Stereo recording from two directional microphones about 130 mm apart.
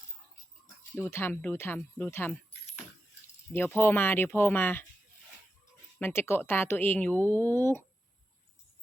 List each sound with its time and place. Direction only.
0.9 s speech: 15° left (ahead or behind)
3.5 s speech: 20° left (ahead or behind)
6.0 s speech: 20° left (ahead or behind)